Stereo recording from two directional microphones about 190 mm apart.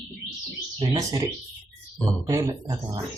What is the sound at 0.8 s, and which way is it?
Speech, 20° right (ahead or behind).